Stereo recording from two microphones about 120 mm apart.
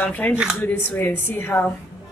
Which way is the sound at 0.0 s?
15° left (ahead or behind).